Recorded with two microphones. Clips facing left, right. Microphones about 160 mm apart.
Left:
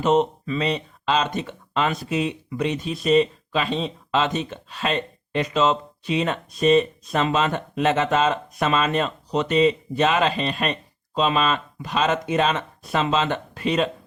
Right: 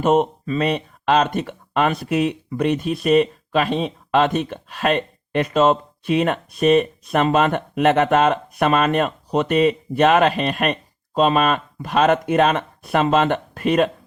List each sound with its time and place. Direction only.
0.0 s speech: 50° right (ahead or behind)